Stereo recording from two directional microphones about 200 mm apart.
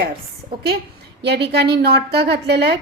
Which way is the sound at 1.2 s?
55° right (ahead or behind).